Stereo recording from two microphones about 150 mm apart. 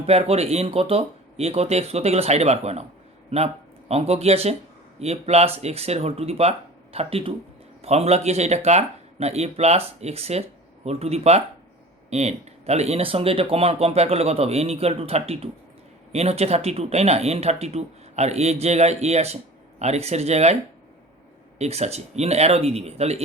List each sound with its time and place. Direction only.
0.0 s speech: 40° right (ahead or behind)
21.6 s speech: 45° right (ahead or behind)